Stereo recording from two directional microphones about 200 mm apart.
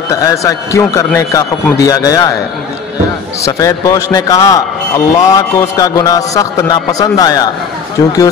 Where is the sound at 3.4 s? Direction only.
15° left (ahead or behind).